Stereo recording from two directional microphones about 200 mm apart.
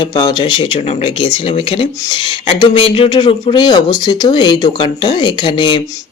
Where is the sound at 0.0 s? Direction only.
20° left (ahead or behind).